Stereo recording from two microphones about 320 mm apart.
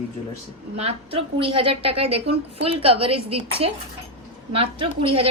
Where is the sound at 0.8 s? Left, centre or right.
Centre.